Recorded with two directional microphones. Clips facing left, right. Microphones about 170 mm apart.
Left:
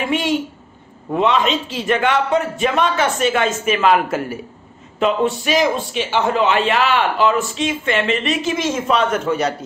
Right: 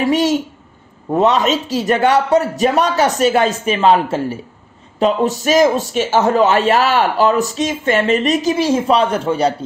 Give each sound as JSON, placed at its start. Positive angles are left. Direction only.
{"t": 0.0, "sound": "a man's voice", "side_deg": -40}